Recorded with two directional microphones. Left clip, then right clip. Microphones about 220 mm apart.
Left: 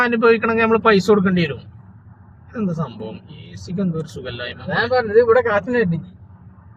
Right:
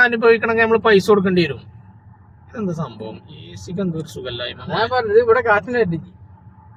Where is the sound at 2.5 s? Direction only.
15° right (ahead or behind).